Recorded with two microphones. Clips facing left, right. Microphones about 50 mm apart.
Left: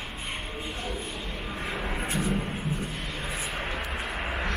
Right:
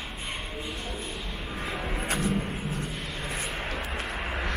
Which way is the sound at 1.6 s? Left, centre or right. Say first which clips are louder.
Even; centre.